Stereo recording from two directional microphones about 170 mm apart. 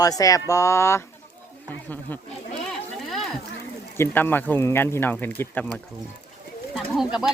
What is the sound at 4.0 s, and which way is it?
Speech, 10° left (ahead or behind).